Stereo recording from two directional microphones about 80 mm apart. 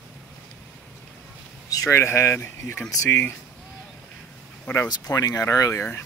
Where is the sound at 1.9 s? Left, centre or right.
Left.